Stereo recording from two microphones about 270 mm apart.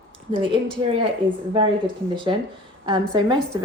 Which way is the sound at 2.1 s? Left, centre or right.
Centre.